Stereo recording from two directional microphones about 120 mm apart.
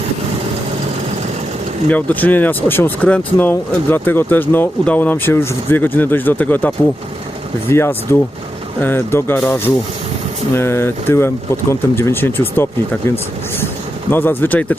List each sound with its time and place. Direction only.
1.9 s speech: 15° left (ahead or behind)
14.1 s speech: 15° left (ahead or behind)